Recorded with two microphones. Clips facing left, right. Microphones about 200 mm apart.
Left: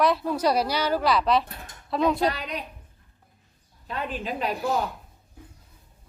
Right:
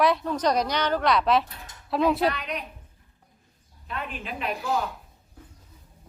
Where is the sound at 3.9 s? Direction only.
35° left (ahead or behind).